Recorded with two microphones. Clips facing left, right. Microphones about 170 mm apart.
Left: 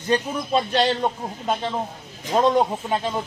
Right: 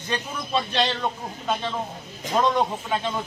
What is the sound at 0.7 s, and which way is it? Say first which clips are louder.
Speech: left 4 dB; 40° left (ahead or behind).